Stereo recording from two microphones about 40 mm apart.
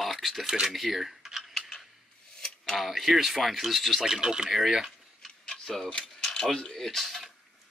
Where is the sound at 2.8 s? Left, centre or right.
Centre.